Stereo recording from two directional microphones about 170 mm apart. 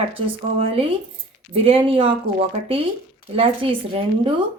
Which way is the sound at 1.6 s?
35° right (ahead or behind).